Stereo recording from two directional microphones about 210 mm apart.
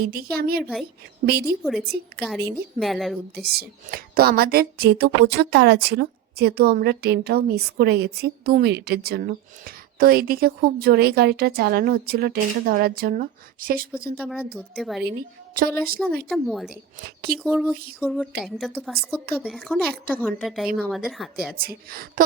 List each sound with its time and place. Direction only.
0.0 s a woman's voice: 45° right (ahead or behind)
1.6 s a woman's voice: centre (ahead or behind)
3.4 s a woman's voice: 50° right (ahead or behind)
14.2 s a woman's voice: 5° right (ahead or behind)
15.2 s a woman's voice: 45° right (ahead or behind)
16.3 s a woman's voice: centre (ahead or behind)
21.6 s a woman's voice: 45° right (ahead or behind)